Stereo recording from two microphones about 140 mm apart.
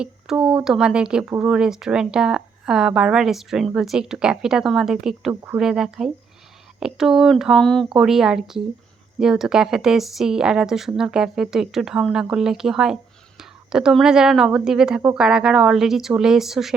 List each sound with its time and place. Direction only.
0.0 s speech: 5° right (ahead or behind)
5.3 s speech: 15° right (ahead or behind)
5.5 s speech: 5° right (ahead or behind)